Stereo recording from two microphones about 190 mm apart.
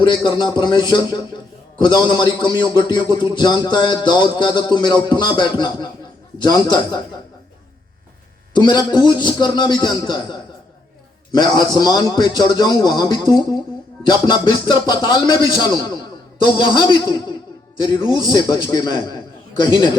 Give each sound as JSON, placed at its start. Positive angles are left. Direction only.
{"t": 0.0, "sound": "music", "side_deg": 25}
{"t": 8.5, "sound": "music", "side_deg": 25}